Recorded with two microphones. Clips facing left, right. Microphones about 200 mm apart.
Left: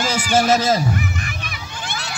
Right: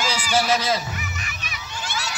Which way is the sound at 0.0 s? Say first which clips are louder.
Left 5 dB; 50° left (ahead or behind).